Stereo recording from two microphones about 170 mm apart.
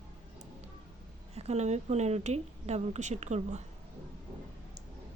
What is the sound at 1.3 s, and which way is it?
Speech, 40° right (ahead or behind).